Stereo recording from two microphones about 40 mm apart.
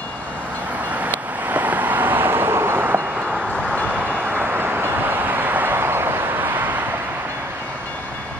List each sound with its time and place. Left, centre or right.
1.0 s vehicle: right
3.9 s vehicle: right